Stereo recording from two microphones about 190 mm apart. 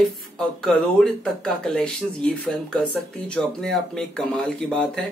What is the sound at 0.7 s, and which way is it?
Speech, 5° left (ahead or behind).